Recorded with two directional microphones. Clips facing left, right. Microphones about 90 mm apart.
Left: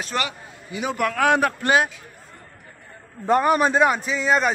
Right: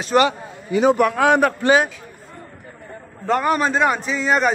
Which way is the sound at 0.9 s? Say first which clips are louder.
Right 4 dB; 20° right (ahead or behind).